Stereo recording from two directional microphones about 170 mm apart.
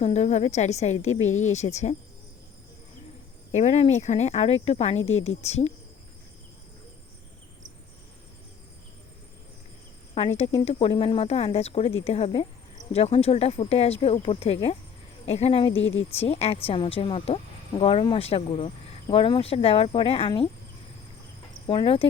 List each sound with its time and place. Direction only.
0.0 s speech: 40° left (ahead or behind)
3.5 s speech: 40° left (ahead or behind)
10.2 s speech: 40° left (ahead or behind)
15.8 s speech: 90° left
16.1 s speech: 35° left (ahead or behind)
21.7 s speech: 30° left (ahead or behind)